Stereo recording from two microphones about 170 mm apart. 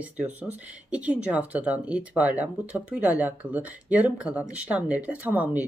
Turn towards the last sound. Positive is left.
turn(degrees=-10)  # may be behind; listen again after turning